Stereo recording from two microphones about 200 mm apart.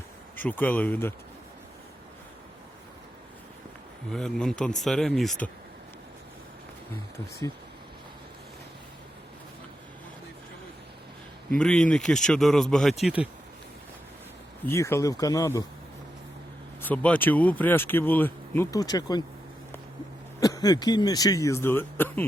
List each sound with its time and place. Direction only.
0.3 s speech: 10° left (ahead or behind)
4.1 s speech: 5° left (ahead or behind)
11.5 s speech: 5° left (ahead or behind)
14.7 s speech: 15° left (ahead or behind)
16.8 s speech: 5° left (ahead or behind)
20.4 s speech: 20° left (ahead or behind)